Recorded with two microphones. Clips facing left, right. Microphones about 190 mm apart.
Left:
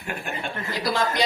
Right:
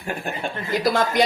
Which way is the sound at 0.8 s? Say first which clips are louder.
Right 4 dB; 50° right (ahead or behind).